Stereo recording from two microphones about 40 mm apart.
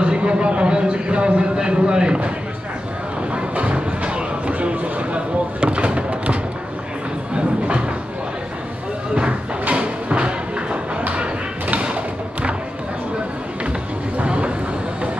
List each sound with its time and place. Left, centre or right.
0.0 s a man's voice: right
3.3 s music: right
7.3 s a sound: right
9.7 s a sound: right
11.8 s thump: right
14.2 s vehicle: right